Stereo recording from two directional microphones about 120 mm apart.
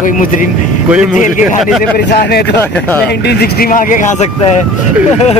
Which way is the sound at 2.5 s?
15° left (ahead or behind).